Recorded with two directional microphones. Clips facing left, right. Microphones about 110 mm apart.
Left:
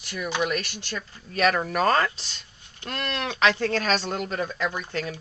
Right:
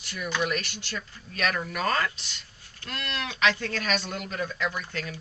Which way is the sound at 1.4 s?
35° left (ahead or behind).